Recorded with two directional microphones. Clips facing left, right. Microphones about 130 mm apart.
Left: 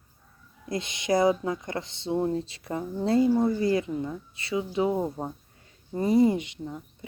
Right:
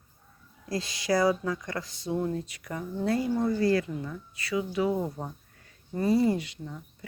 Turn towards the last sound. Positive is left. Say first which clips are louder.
# left 2 dB
turn(degrees=20)  # may be behind; listen again after turning